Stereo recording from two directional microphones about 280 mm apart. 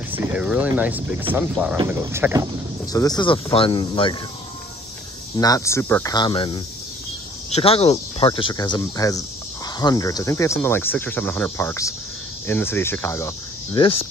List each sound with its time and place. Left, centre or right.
0.1 s speech: centre
2.9 s speech: centre
5.4 s speech: centre
13.7 s speech: centre